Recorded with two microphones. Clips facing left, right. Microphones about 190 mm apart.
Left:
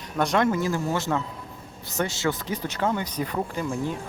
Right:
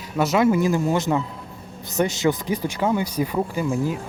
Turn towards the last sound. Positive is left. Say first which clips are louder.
# right 5 dB
turn(degrees=-10)  # may be behind; listen again after turning